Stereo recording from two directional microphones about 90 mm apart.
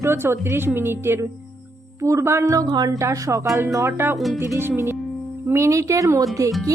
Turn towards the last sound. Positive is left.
turn(degrees=-35)  # may be behind; listen again after turning